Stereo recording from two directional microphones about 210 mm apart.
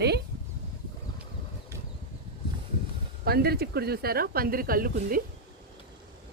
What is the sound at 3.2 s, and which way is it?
Speech, 50° right (ahead or behind).